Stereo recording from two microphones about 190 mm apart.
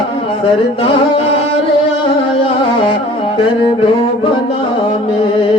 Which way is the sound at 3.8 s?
30° left (ahead or behind).